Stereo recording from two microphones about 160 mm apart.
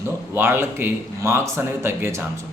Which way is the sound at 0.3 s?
15° right (ahead or behind).